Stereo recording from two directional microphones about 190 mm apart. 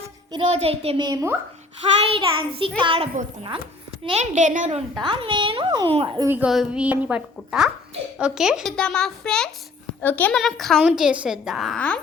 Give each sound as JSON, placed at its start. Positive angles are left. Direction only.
{"t": 0.3, "sound": "a woman's voice", "side_deg": -30}
{"t": 2.0, "sound": "a woman's voice", "side_deg": -30}
{"t": 5.0, "sound": "a woman's voice", "side_deg": -25}
{"t": 6.2, "sound": "a woman's voice", "side_deg": -10}